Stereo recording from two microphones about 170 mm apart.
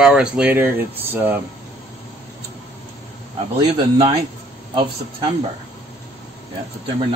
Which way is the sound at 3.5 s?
30° right (ahead or behind).